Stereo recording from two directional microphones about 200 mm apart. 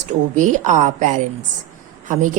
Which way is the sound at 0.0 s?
40° right (ahead or behind).